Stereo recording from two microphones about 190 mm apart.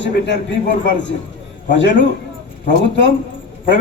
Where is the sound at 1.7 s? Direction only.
70° left (ahead or behind).